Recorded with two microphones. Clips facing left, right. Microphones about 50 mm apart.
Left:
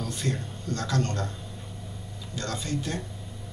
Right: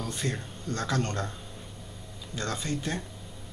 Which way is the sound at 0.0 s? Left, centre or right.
Centre.